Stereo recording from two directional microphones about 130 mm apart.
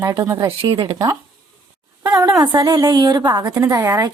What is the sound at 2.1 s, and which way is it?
A woman's voice, 30° right (ahead or behind).